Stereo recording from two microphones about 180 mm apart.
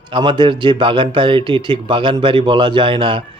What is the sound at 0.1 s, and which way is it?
Speech, 25° right (ahead or behind).